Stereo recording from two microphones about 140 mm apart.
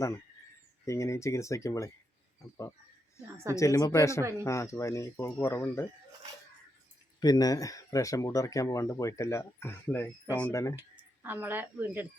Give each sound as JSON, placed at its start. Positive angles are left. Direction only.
{"t": 0.9, "sound": "speech", "side_deg": 20}
{"t": 3.5, "sound": "speech", "side_deg": 20}
{"t": 4.2, "sound": "speech", "side_deg": -20}
{"t": 4.4, "sound": "speech", "side_deg": 20}
{"t": 7.2, "sound": "speech", "side_deg": 25}
{"t": 11.2, "sound": "speech", "side_deg": -15}